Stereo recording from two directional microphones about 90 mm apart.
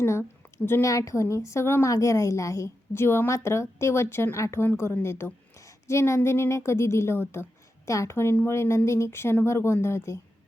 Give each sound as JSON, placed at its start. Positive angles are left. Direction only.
{"t": 0.0, "sound": "a woman's voice", "side_deg": 30}